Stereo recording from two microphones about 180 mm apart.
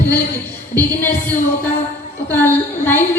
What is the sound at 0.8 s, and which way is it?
Speech, 10° left (ahead or behind).